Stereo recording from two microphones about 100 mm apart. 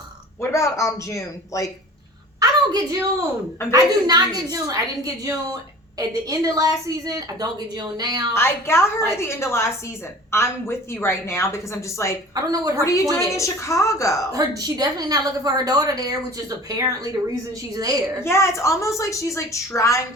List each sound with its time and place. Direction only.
0.4 s a woman's voice: 30° left (ahead or behind)
2.4 s a woman's voice: 35° right (ahead or behind)
8.3 s speech: 25° left (ahead or behind)
12.3 s a woman's voice: 35° right (ahead or behind)
12.8 s a woman's voice: 30° left (ahead or behind)
14.3 s a woman's voice: 40° right (ahead or behind)
18.2 s a woman's voice: 25° left (ahead or behind)